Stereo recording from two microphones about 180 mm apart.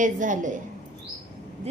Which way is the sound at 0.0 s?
45° right (ahead or behind).